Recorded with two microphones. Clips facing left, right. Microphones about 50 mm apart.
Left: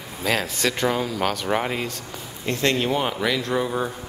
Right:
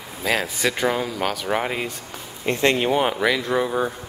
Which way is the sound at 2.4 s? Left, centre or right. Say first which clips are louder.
Right 3 dB; right.